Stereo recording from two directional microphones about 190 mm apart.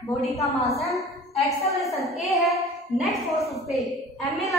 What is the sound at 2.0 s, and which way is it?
Speech, 35° left (ahead or behind).